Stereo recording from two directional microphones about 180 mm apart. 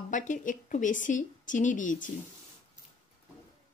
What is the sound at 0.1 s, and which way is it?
A woman's voice, 45° left (ahead or behind).